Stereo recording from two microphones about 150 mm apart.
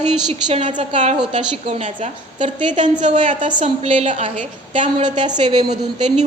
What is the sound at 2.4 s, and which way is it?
A woman's voice, 30° right (ahead or behind).